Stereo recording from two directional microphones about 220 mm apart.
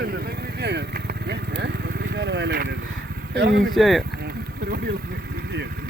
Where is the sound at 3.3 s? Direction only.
50° right (ahead or behind).